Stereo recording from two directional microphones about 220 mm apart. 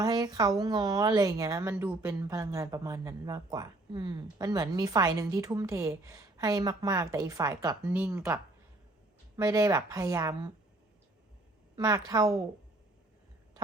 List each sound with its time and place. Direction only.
0.0 s a woman's voice: 15° right (ahead or behind)
7.9 s a woman's voice: 5° right (ahead or behind)
11.8 s a woman's voice: 15° right (ahead or behind)